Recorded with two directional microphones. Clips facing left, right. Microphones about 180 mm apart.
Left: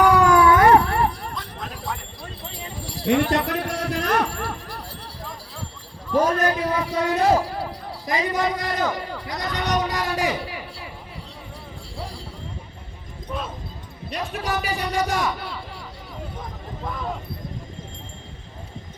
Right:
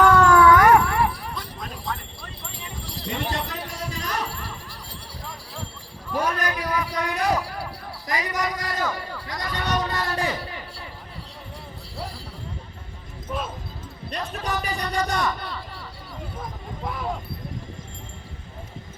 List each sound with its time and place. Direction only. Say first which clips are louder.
0.0 s howl: even; 15° left (ahead or behind); by 1.3 s 40° left (ahead or behind)
3.1 s jingle bell: left 10 dB; 70° left (ahead or behind)
6.1 s basketball bounce: left 6 dB; 30° left (ahead or behind)
7.9 s a man's voice: left 4 dB; 20° left (ahead or behind)
13.2 s a man's voice: even; centre (ahead or behind)